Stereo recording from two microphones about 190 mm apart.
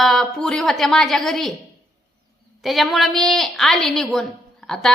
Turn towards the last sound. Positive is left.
turn(degrees=0)  # may be behind; listen again after turning